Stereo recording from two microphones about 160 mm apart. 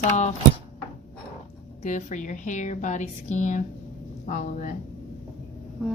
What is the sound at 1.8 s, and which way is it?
Speech, 50° left (ahead or behind).